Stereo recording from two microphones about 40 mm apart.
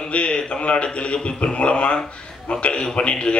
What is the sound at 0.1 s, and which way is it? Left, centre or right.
A man's voice, left.